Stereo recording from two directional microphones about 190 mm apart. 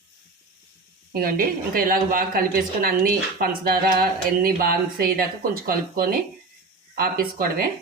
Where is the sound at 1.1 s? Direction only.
50° right (ahead or behind).